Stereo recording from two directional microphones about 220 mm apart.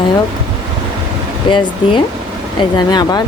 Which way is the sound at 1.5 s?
20° left (ahead or behind).